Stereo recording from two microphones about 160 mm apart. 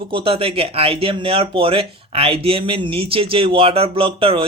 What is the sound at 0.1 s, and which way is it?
Speech, 35° right (ahead or behind).